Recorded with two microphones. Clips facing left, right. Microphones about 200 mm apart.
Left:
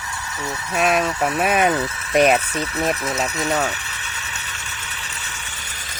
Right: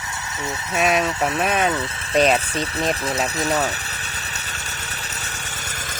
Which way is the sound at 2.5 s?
30° right (ahead or behind).